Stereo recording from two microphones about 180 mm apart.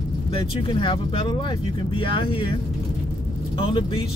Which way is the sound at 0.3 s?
30° left (ahead or behind).